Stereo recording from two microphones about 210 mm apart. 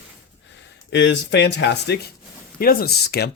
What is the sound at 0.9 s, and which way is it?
Speech, 60° left (ahead or behind).